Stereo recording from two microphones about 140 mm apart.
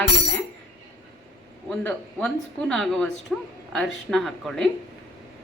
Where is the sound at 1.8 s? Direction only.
10° left (ahead or behind).